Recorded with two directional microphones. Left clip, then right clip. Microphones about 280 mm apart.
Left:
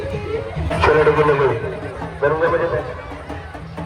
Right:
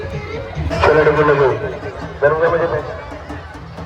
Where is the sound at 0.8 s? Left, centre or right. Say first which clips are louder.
Right 2 dB; right.